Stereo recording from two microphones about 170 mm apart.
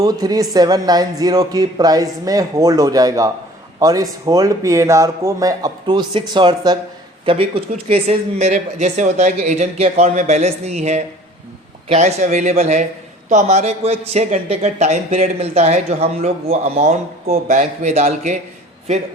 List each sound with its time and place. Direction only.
0.0 s speech: 20° right (ahead or behind); by 18.3 s 45° right (ahead or behind)